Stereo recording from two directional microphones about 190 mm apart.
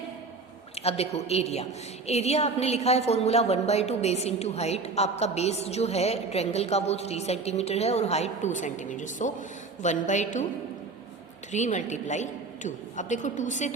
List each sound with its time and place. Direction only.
0.8 s a woman's voice: 35° left (ahead or behind)
11.5 s a woman's voice: 40° left (ahead or behind)